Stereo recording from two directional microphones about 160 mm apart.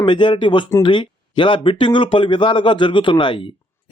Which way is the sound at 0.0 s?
30° left (ahead or behind).